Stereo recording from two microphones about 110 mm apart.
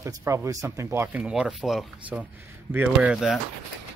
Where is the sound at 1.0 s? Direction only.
15° right (ahead or behind).